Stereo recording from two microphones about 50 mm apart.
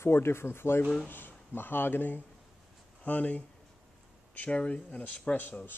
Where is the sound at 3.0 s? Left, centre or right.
Left.